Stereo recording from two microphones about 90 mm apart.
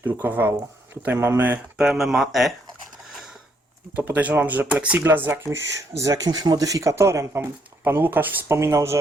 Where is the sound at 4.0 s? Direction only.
20° right (ahead or behind).